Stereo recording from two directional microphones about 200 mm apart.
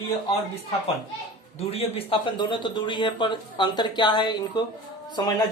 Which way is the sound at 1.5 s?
30° left (ahead or behind).